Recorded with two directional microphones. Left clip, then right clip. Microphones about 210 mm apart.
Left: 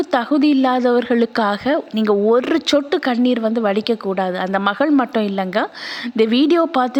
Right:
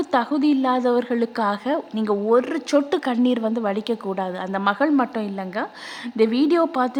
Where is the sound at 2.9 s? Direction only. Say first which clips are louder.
Left 4 dB; 10° left (ahead or behind).